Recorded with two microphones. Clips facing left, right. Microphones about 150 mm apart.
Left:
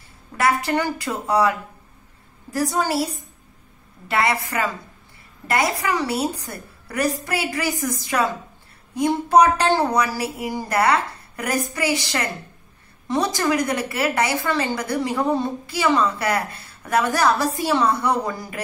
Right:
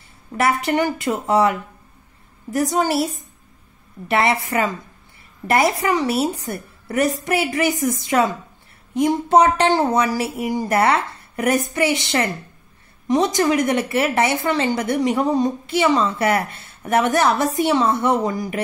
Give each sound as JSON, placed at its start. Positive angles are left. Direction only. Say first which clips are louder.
{"t": 0.4, "sound": "a woman's voice", "louder": "right 2 dB", "side_deg": -20}
{"t": 2.5, "sound": "a woman's voice", "louder": "right 3 dB", "side_deg": -20}
{"t": 4.1, "sound": "a woman's voice", "louder": "right 3 dB", "side_deg": -25}